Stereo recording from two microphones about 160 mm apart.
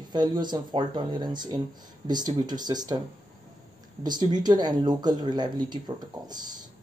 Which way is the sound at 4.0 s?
25° right (ahead or behind).